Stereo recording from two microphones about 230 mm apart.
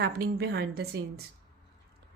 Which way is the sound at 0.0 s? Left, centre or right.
Right.